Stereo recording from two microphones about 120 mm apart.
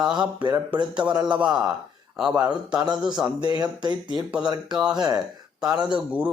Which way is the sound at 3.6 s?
40° right (ahead or behind).